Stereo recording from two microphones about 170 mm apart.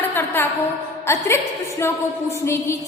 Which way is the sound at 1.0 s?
15° left (ahead or behind).